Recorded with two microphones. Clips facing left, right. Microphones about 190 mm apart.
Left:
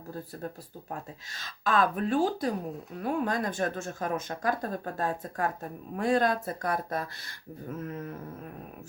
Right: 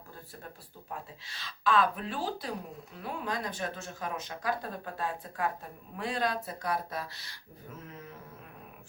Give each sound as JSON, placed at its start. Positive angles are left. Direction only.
{"t": 0.9, "sound": "speech", "side_deg": 45}